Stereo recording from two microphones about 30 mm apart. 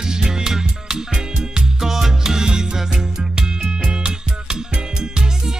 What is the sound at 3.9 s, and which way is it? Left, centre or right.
Music, right.